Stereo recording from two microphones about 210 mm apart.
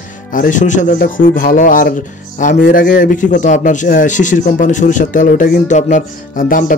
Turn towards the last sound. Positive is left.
turn(degrees=40)  # may be behind; listen again after turning